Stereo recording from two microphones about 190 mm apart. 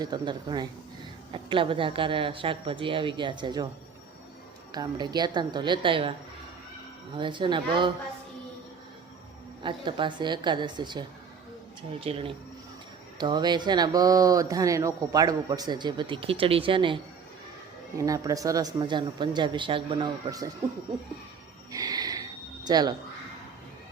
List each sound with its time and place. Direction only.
0.0 s speech: 20° right (ahead or behind)
4.7 s speech: 20° right (ahead or behind)
7.2 s speech: 25° right (ahead or behind)
9.6 s speech: 25° right (ahead or behind)
21.7 s a sound: 20° right (ahead or behind)